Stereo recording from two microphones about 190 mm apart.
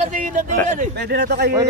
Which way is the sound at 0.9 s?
60° right (ahead or behind).